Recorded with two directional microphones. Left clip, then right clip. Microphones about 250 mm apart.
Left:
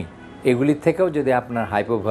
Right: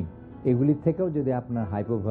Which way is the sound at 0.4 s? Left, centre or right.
Centre.